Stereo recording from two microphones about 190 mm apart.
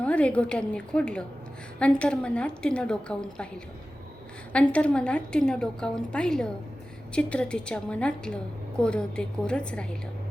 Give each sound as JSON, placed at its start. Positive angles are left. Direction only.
{"t": 0.0, "sound": "a woman's voice", "side_deg": 5}
{"t": 4.5, "sound": "a woman's voice", "side_deg": 5}